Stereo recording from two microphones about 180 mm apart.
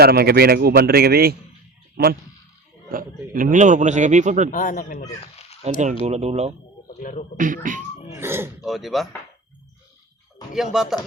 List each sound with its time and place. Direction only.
0.0 s a man's voice: 60° right (ahead or behind)
2.9 s a man's voice: 50° right (ahead or behind)
4.5 s speech: 45° left (ahead or behind)
5.2 s fowl: 35° left (ahead or behind)
6.1 s speech: 35° right (ahead or behind)
6.8 s a man's voice: 45° left (ahead or behind)
7.3 s a man's voice: 45° right (ahead or behind)
8.2 s speech: 15° right (ahead or behind)
8.6 s speech: centre (ahead or behind)
10.5 s speech: centre (ahead or behind)